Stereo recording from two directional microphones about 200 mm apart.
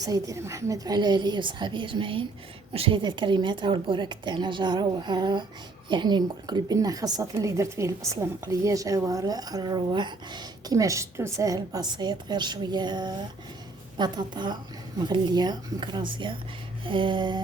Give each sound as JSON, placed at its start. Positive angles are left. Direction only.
{"t": 0.0, "sound": "a woman's voice", "side_deg": -15}